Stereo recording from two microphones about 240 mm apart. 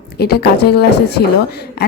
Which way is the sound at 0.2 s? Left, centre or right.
Left.